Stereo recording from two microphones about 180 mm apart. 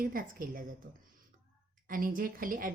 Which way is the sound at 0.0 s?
50° right (ahead or behind).